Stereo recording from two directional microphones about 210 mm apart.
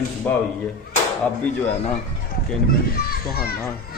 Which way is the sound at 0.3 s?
10° left (ahead or behind).